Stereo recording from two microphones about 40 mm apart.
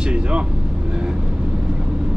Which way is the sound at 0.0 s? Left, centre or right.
Right.